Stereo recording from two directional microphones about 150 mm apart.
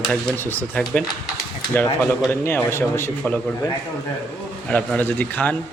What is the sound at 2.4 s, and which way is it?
Speech, 15° left (ahead or behind).